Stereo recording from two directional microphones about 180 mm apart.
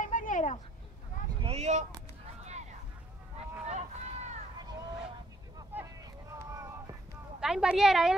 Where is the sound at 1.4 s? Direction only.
35° right (ahead or behind).